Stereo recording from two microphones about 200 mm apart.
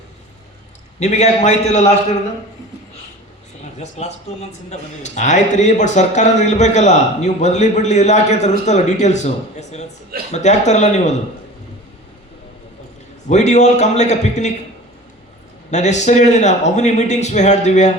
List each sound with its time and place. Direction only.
0.9 s a man's voice: 35° left (ahead or behind)
3.6 s a man's voice: 35° left (ahead or behind)
13.2 s a man's voice: 35° left (ahead or behind)
15.7 s a man's voice: 35° left (ahead or behind)